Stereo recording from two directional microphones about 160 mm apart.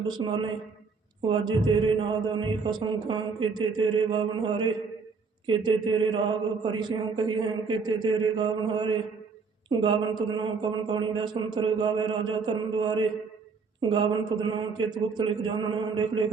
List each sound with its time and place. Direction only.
0.1 s a man's voice: 25° right (ahead or behind)